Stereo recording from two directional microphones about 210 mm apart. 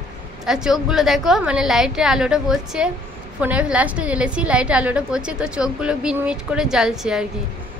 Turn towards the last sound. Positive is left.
turn(degrees=0)  # may be behind; listen again after turning